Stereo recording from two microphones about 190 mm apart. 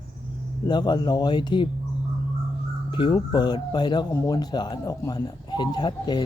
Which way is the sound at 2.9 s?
25° left (ahead or behind).